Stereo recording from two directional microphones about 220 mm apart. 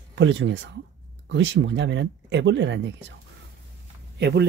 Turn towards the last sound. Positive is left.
turn(degrees=-50)  # may be behind; listen again after turning